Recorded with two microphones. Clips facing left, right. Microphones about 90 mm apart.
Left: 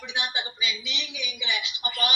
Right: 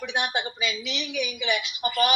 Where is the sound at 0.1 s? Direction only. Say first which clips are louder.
Right 3 dB; 55° right (ahead or behind).